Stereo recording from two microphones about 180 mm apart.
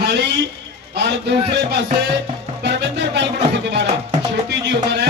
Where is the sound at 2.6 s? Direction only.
75° right (ahead or behind).